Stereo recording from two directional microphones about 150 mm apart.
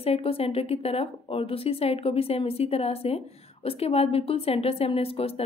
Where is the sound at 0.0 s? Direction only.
40° left (ahead or behind).